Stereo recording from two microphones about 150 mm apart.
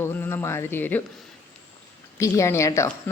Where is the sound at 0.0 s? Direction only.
15° left (ahead or behind).